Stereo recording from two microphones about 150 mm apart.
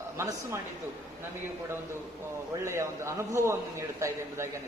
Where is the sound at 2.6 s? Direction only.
20° right (ahead or behind).